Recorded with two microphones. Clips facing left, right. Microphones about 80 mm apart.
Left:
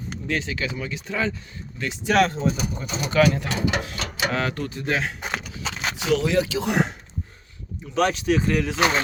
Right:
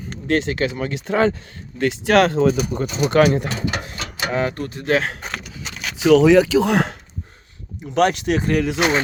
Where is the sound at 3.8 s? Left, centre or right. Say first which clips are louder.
Even; right.